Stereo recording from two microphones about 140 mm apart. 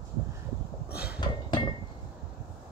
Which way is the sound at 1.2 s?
30° left (ahead or behind).